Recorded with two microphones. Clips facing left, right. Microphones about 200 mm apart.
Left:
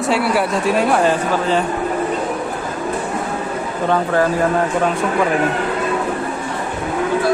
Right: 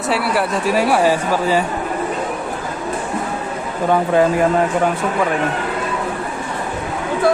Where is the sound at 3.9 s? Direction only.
15° right (ahead or behind).